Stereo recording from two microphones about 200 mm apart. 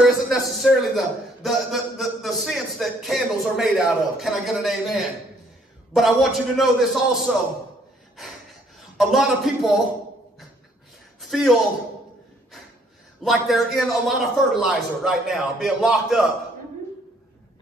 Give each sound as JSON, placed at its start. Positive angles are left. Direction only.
{"t": 0.0, "sound": "a man's voice", "side_deg": 0}
{"t": 8.7, "sound": "a man's voice", "side_deg": 0}
{"t": 11.1, "sound": "a sound", "side_deg": 0}
{"t": 13.2, "sound": "a man's voice", "side_deg": 0}